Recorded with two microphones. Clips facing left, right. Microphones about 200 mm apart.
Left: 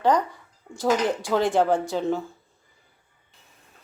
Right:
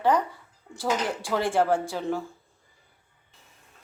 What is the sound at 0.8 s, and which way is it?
Speech, 15° left (ahead or behind).